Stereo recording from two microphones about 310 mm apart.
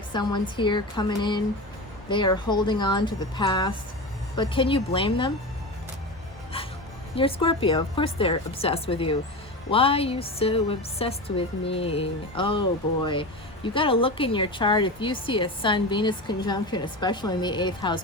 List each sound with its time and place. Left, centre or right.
0.1 s a woman's voice: centre
7.2 s a woman's voice: centre
13.7 s a woman's voice: centre